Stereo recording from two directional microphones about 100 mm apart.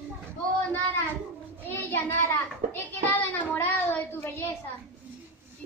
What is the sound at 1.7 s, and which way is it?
Child singing, 25° left (ahead or behind).